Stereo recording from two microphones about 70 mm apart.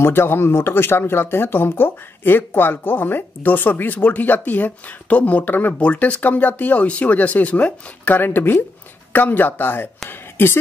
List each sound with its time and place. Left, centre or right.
0.0 s speech: left